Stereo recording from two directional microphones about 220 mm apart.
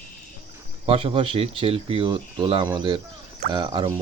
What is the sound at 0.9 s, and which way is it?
Speech, 25° right (ahead or behind).